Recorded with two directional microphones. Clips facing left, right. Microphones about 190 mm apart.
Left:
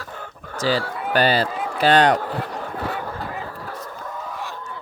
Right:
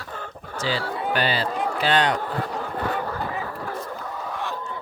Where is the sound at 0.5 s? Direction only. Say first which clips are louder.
Left 4 dB; 40° left (ahead or behind).